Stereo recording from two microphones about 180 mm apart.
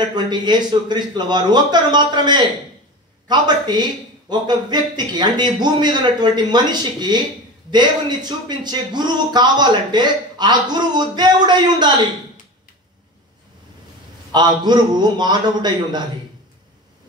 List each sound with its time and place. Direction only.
0.0 s a man's voice: 25° right (ahead or behind)
14.3 s a man's voice: 25° right (ahead or behind)